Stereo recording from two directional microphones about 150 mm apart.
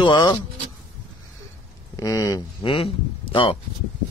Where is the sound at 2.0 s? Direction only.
25° left (ahead or behind).